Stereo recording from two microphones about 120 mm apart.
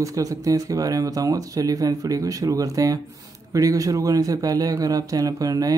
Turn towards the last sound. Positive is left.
turn(degrees=-30)  # may be behind; listen again after turning